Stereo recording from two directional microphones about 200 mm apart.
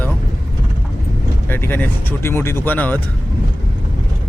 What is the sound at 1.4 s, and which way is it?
Speech, 10° left (ahead or behind).